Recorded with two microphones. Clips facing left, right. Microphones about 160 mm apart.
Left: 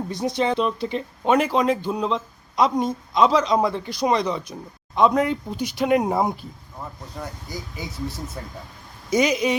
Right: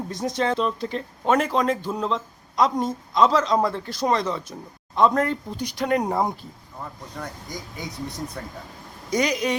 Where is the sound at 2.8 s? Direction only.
20° left (ahead or behind).